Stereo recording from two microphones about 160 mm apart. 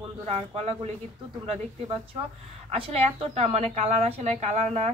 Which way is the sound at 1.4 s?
35° right (ahead or behind).